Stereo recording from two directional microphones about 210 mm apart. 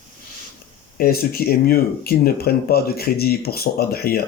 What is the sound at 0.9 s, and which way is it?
Speech, 45° left (ahead or behind).